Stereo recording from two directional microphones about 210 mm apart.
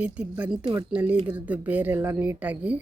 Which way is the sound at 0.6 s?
25° right (ahead or behind).